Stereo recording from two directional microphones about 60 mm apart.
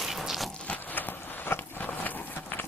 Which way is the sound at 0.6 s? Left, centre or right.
Left.